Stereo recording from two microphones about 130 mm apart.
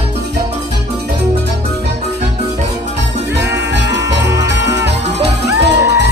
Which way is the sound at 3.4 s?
25° right (ahead or behind).